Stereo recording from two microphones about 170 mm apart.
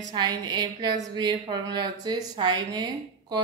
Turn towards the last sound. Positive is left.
turn(degrees=-25)  # may be behind; listen again after turning